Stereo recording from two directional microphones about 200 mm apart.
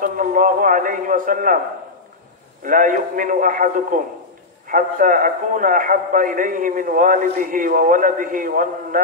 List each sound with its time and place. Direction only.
0.0 s a man's voice: 45° right (ahead or behind)
2.6 s a man's voice: 40° right (ahead or behind)